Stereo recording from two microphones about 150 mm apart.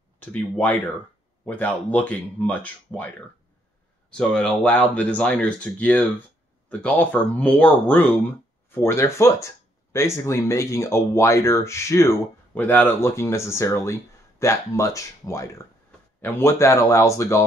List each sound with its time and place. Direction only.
0.2 s speech: 10° left (ahead or behind)